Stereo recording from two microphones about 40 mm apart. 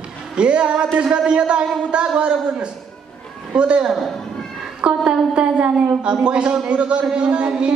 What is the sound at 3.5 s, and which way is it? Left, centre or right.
A woman's voice, right.